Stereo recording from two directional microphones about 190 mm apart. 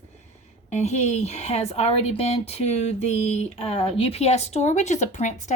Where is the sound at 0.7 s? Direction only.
35° left (ahead or behind).